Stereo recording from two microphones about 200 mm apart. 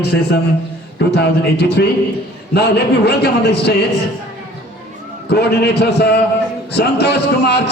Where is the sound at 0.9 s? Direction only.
55° left (ahead or behind).